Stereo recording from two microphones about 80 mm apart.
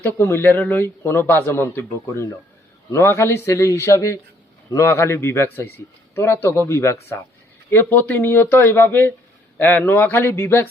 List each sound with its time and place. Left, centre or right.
0.0 s a man's voice: left